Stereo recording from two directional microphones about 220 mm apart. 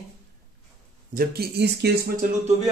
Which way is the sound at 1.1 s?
45° right (ahead or behind).